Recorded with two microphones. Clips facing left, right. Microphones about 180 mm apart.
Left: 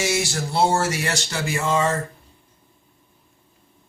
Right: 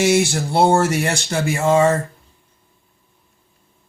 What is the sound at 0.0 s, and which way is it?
Speech, 60° right (ahead or behind).